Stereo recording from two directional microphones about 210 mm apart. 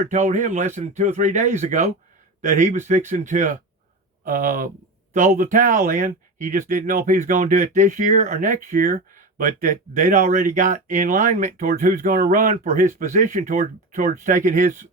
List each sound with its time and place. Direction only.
0.0 s speech: 35° right (ahead or behind)